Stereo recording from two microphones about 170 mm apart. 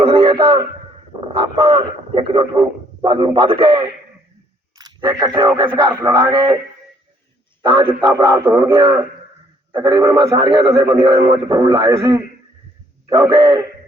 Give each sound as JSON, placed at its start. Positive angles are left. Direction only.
{"t": 0.0, "sound": "a sound", "side_deg": -35}
{"t": 1.3, "sound": "a man's voice", "side_deg": -30}
{"t": 7.6, "sound": "a man's voice", "side_deg": -25}